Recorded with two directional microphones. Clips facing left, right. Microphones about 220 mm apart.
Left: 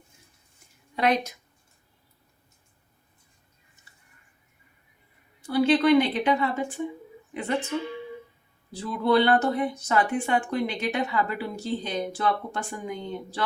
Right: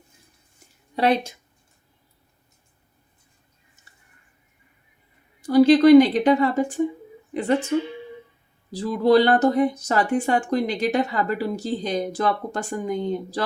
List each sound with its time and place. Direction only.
0.9 s speech: 30° right (ahead or behind)
5.4 s speech: 40° right (ahead or behind)